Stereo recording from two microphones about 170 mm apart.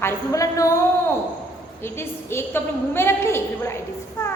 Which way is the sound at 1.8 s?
15° left (ahead or behind).